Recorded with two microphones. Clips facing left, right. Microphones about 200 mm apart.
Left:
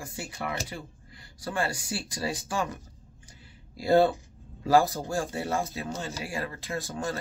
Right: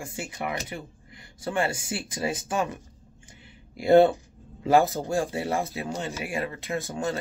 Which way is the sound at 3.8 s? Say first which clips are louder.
Right 4 dB; 20° right (ahead or behind).